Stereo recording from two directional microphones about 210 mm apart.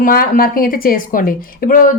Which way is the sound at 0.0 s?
40° left (ahead or behind).